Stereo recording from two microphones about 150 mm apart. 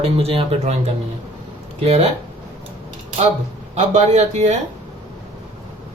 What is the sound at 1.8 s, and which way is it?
Speech, 45° right (ahead or behind).